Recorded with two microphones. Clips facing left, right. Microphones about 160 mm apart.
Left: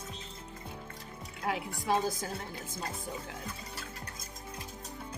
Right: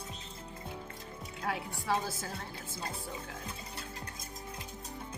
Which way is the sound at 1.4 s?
20° left (ahead or behind).